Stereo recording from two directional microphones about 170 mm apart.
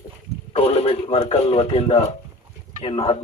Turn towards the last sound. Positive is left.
turn(degrees=30)  # may be behind; listen again after turning